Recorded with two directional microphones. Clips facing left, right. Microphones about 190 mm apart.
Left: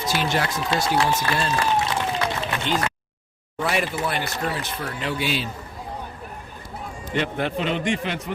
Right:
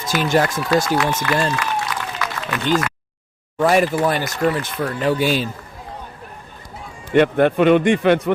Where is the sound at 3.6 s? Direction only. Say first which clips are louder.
Right 8 dB; 45° right (ahead or behind).